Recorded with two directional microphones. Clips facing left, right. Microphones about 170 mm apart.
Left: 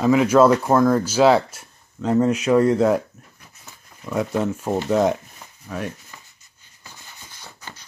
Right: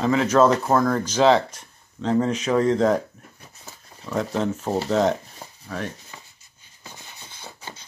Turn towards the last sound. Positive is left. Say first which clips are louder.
# right 2 dB
turn(degrees=-20)  # may be behind; listen again after turning